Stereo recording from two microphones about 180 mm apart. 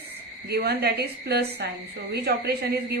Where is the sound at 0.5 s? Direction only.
65° right (ahead or behind).